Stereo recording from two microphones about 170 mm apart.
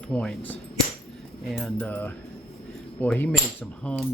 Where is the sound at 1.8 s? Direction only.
10° left (ahead or behind).